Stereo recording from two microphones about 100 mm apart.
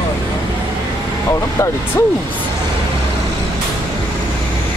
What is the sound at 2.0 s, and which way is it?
Vehicle, 25° left (ahead or behind).